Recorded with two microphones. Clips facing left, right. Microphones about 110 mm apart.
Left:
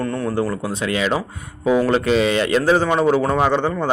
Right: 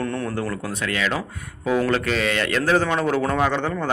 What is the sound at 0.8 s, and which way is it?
Speech, 20° left (ahead or behind).